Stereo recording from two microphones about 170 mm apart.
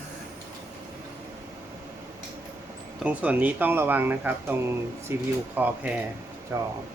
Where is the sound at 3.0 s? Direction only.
10° right (ahead or behind).